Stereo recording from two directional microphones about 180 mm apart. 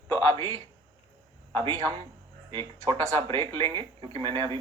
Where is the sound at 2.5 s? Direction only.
30° right (ahead or behind).